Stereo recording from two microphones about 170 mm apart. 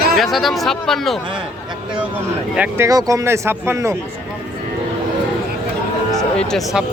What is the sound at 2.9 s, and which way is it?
Speech, 20° right (ahead or behind).